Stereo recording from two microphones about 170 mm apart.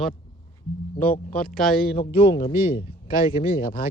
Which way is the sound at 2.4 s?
60° left (ahead or behind).